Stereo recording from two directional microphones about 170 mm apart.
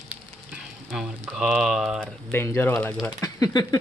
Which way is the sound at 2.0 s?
15° left (ahead or behind).